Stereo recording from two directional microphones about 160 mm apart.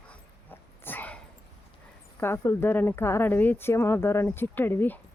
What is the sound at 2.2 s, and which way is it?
Speech, 15° left (ahead or behind).